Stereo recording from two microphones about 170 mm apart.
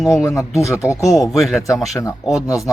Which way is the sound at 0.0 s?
Centre (ahead or behind).